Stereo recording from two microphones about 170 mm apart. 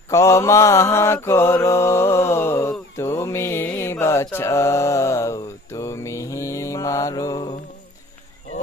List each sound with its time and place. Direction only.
0.1 s mantra: 15° left (ahead or behind)